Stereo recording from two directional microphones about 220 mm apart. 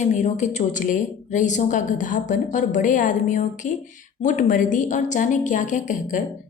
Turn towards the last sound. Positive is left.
turn(degrees=35)  # may be behind; listen again after turning